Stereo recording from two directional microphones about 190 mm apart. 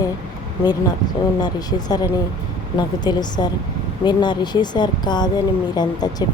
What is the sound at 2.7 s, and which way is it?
Speech, 20° left (ahead or behind).